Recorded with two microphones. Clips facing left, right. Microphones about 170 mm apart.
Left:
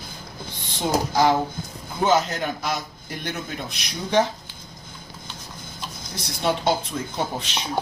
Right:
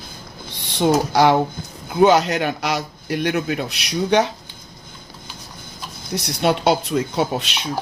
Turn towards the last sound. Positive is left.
turn(degrees=-70)  # may be behind; listen again after turning